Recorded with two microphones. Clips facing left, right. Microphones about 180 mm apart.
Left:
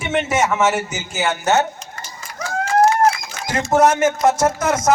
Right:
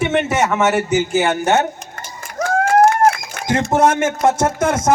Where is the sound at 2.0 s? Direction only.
50° right (ahead or behind).